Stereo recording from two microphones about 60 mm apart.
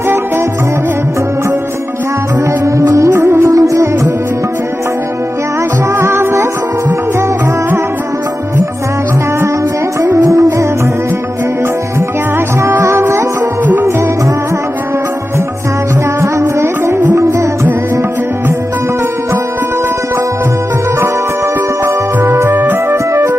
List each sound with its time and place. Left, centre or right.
2.6 s music: right
3.1 s music: right
3.5 s music: right
5.9 s music: right
10.2 s music: right
12.6 s music: right
16.6 s music: right
21.8 s music: right
23.1 s music: right